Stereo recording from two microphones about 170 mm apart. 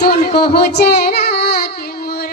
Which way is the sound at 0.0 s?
70° left (ahead or behind).